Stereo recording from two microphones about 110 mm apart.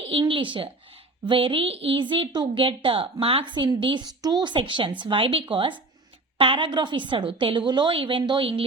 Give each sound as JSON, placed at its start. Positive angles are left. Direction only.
{"t": 0.1, "sound": "a woman's voice", "side_deg": -50}
{"t": 3.5, "sound": "a woman's voice", "side_deg": -45}